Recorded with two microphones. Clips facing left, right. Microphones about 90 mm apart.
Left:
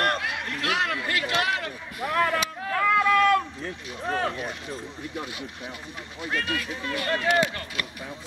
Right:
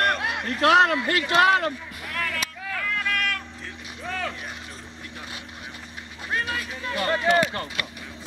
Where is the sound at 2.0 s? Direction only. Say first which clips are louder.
Left 7 dB; 35° left (ahead or behind).